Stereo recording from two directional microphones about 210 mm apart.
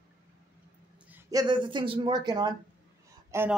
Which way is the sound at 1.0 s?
10° right (ahead or behind).